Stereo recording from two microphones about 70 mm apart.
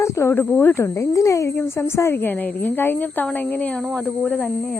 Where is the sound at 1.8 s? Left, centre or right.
Left.